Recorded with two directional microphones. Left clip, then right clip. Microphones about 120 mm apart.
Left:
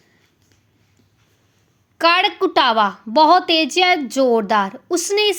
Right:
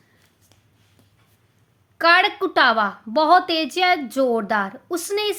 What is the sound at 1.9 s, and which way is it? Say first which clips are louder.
A woman's voice: left 1 dB; 15° left (ahead or behind).